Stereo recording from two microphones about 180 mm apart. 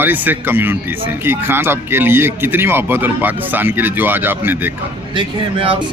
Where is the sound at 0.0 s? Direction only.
10° right (ahead or behind).